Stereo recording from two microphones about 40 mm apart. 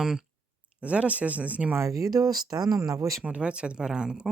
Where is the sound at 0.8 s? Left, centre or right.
Right.